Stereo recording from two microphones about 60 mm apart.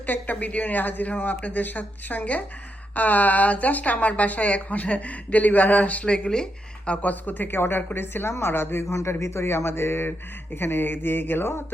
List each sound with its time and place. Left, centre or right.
0.0 s a woman's voice: left